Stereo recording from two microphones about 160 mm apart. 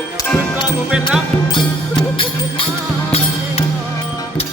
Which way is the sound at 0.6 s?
5° right (ahead or behind).